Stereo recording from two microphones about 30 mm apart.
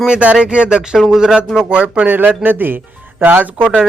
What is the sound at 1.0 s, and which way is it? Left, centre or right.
Speech, centre.